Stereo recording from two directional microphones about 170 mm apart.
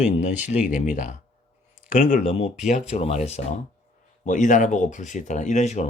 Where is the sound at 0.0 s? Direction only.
45° left (ahead or behind).